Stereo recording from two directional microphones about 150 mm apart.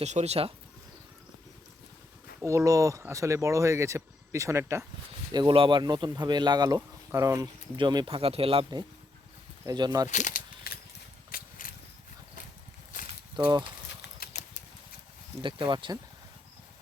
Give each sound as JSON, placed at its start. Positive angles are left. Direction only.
{"t": 0.0, "sound": "speech", "side_deg": -50}
{"t": 2.4, "sound": "speech", "side_deg": -20}
{"t": 5.3, "sound": "speech", "side_deg": -30}
{"t": 9.6, "sound": "speech", "side_deg": -25}
{"t": 10.1, "sound": "speech", "side_deg": 55}
{"t": 10.7, "sound": "a sound", "side_deg": 80}
{"t": 11.3, "sound": "a sound", "side_deg": 70}
{"t": 14.2, "sound": "a sound", "side_deg": 80}
{"t": 15.4, "sound": "speech", "side_deg": -35}